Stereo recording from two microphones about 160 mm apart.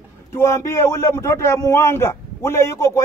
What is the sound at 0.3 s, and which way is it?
Speech, 15° left (ahead or behind).